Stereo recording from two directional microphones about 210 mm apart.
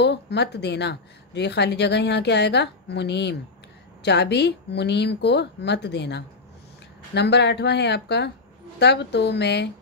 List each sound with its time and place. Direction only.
0.0 s a woman's voice: 55° left (ahead or behind)